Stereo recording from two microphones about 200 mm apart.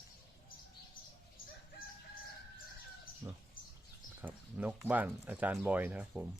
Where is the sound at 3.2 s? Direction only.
20° right (ahead or behind).